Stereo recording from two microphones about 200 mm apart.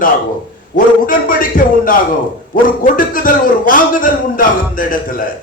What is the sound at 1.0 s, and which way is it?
A man's voice, 45° left (ahead or behind).